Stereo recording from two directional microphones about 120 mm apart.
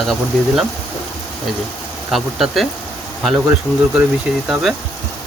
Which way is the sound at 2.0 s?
Centre (ahead or behind).